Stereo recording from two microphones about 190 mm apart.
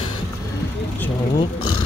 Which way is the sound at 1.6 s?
90° left.